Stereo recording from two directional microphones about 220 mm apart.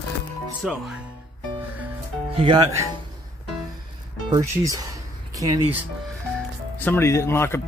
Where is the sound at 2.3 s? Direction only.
20° right (ahead or behind).